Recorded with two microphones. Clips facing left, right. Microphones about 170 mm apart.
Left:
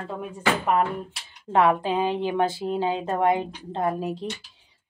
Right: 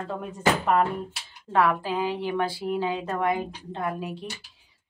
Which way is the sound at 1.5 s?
20° left (ahead or behind).